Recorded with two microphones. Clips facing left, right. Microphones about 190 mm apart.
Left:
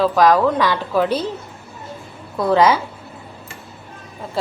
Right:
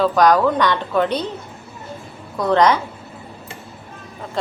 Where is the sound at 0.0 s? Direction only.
Centre (ahead or behind).